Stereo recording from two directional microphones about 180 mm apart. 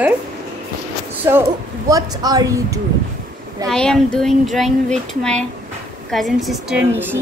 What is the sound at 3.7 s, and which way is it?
Speech, 5° left (ahead or behind).